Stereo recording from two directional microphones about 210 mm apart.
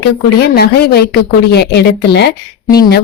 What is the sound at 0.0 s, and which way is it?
A woman's voice, 50° left (ahead or behind).